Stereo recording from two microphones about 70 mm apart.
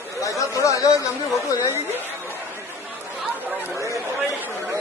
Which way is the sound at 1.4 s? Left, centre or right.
Left.